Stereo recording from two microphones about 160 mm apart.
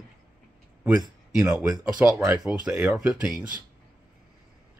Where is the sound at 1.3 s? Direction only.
15° right (ahead or behind).